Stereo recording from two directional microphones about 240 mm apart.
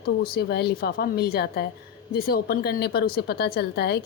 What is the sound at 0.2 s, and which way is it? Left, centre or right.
Speech, left.